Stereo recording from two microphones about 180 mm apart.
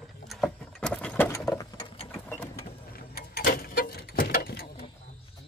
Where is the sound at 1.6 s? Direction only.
25° left (ahead or behind).